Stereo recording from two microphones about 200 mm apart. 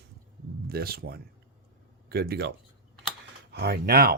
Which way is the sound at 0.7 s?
50° right (ahead or behind).